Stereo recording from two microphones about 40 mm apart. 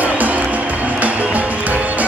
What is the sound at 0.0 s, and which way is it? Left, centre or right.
Music, right.